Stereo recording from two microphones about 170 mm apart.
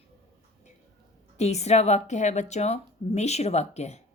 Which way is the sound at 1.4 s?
40° left (ahead or behind).